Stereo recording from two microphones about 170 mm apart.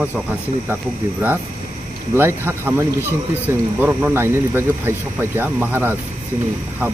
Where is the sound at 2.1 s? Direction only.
15° right (ahead or behind).